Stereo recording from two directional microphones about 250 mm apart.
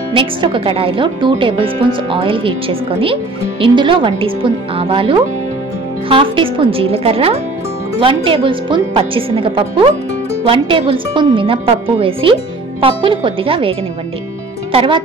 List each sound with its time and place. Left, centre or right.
0.1 s speech: centre